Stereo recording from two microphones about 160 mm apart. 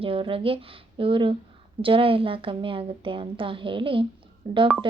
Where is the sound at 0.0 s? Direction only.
35° right (ahead or behind).